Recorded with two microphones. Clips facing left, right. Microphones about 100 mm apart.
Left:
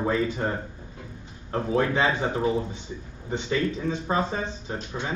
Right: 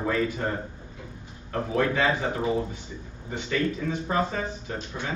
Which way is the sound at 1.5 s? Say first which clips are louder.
Left 1 dB; 25° left (ahead or behind).